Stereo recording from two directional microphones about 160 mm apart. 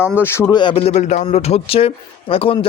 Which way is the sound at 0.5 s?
30° left (ahead or behind).